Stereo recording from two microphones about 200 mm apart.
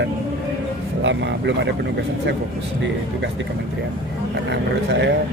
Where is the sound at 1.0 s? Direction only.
65° right (ahead or behind).